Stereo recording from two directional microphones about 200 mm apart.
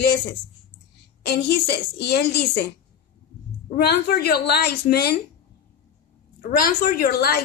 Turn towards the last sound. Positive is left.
turn(degrees=50)  # may be behind; listen again after turning